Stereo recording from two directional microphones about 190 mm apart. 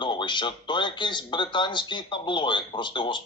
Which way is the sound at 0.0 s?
25° left (ahead or behind).